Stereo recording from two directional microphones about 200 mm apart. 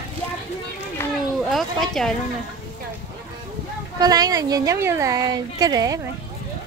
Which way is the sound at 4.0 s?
20° right (ahead or behind).